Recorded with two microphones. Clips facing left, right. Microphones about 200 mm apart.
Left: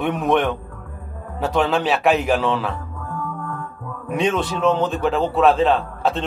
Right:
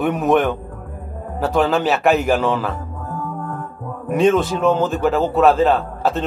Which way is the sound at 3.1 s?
40° right (ahead or behind).